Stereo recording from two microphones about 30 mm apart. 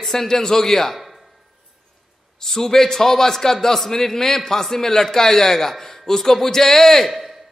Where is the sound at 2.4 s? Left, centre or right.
Centre.